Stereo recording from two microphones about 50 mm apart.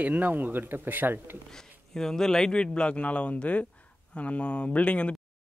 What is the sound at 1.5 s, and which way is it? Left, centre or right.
A man's voice, centre.